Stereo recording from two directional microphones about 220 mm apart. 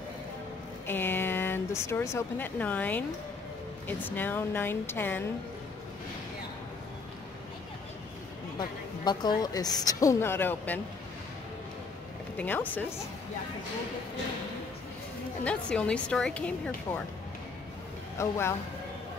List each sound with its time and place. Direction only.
0.8 s speech: 10° left (ahead or behind)
8.5 s a sound: 20° left (ahead or behind)
9.4 s speech: 15° left (ahead or behind)
12.4 s speech: 10° left (ahead or behind)
15.4 s a woman's voice: 5° left (ahead or behind)
18.1 s speech: 10° left (ahead or behind)